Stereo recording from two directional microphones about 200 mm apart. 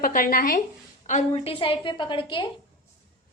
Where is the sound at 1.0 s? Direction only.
30° left (ahead or behind).